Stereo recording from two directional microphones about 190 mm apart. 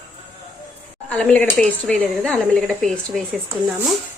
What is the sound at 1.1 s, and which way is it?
A woman's voice, 5° left (ahead or behind).